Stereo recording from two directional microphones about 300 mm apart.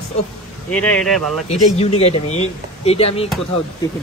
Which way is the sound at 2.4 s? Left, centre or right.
Centre.